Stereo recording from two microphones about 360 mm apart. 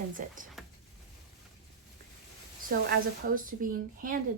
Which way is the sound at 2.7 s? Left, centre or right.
Right.